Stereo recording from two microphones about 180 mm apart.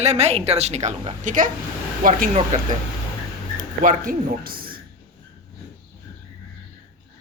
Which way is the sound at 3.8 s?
45° right (ahead or behind).